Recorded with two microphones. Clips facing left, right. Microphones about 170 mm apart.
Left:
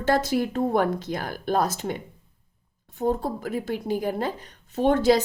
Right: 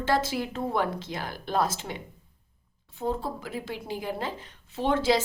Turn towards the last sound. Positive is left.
turn(degrees=45)  # may be behind; listen again after turning